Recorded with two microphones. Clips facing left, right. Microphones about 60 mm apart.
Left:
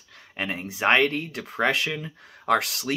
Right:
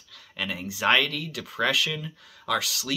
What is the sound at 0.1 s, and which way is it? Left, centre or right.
Speech, left.